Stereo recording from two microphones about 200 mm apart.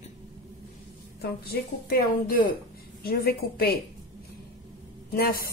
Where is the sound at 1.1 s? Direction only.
50° left (ahead or behind).